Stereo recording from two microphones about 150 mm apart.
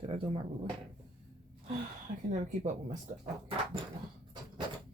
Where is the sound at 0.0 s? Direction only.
40° right (ahead or behind).